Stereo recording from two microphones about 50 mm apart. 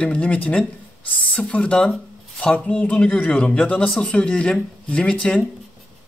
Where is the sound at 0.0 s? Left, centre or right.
Left; by 5.4 s centre.